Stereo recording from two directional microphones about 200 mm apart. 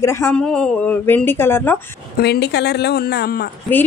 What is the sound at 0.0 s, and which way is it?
A woman's voice, 15° left (ahead or behind).